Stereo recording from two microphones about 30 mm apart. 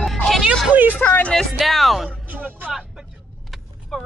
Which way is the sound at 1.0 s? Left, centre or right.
Left.